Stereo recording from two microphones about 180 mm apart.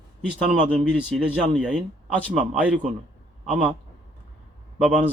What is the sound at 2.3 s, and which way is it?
Speech, 10° right (ahead or behind).